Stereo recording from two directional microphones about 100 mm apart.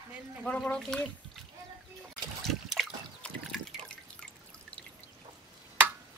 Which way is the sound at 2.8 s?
Centre (ahead or behind).